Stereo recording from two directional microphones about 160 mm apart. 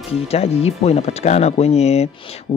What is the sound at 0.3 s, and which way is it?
Speech, 40° left (ahead or behind).